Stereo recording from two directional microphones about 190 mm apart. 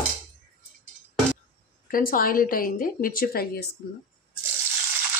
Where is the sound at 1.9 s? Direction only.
50° left (ahead or behind).